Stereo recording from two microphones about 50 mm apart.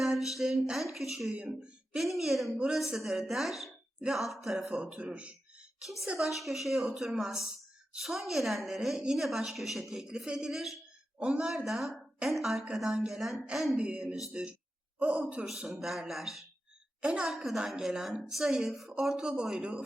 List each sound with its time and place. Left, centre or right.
0.0 s a sound: centre
0.9 s a woman's voice: centre
1.3 s speech: centre
2.0 s a woman's voice: centre
2.5 s a woman's voice: centre
4.6 s speech: right
5.8 s a woman's voice: centre
11.2 s speech: right
11.4 s a woman's voice: centre
13.7 s speech: right
15.8 s a woman's voice: centre
17.0 s a woman's voice: centre
17.2 s a woman's voice: centre